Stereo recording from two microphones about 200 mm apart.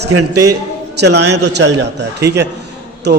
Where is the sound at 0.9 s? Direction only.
55° right (ahead or behind).